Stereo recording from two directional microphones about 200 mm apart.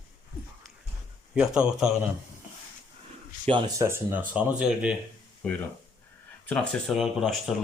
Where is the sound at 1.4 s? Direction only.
5° right (ahead or behind).